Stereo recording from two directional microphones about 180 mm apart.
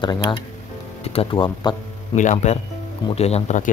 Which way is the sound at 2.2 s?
40° left (ahead or behind).